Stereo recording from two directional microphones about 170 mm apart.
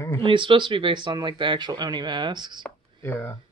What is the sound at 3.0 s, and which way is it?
Speech, 15° left (ahead or behind).